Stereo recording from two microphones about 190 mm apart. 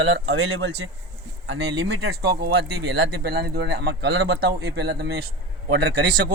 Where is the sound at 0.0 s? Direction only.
65° right (ahead or behind).